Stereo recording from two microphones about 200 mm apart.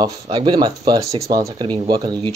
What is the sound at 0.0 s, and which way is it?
Speech, 20° right (ahead or behind).